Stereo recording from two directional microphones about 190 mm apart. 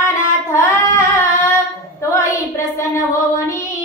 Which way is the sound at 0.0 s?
15° left (ahead or behind).